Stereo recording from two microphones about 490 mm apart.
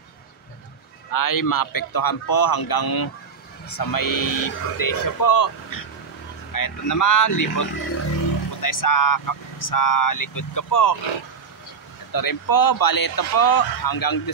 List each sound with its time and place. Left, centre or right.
1.1 s speech: left
12.1 s speech: left